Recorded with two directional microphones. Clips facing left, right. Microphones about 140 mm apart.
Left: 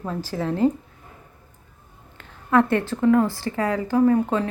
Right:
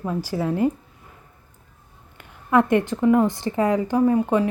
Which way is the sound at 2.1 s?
15° right (ahead or behind).